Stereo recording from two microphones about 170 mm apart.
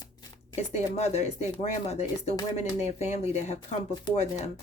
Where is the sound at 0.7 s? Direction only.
40° left (ahead or behind).